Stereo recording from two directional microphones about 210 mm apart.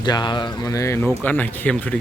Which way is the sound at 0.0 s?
20° left (ahead or behind).